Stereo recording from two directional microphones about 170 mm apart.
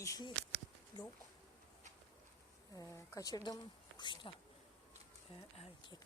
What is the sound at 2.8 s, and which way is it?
Speech, 20° left (ahead or behind).